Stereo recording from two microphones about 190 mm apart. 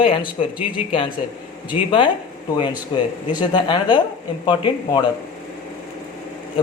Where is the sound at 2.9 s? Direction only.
25° left (ahead or behind).